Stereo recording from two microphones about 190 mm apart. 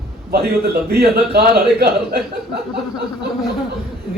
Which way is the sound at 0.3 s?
55° right (ahead or behind).